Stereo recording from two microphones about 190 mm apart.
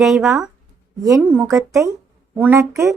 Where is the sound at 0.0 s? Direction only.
Centre (ahead or behind).